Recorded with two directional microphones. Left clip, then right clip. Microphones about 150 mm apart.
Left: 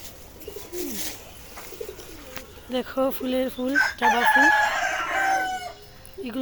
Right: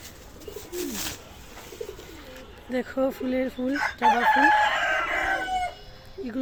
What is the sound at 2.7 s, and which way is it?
Speech, 10° right (ahead or behind).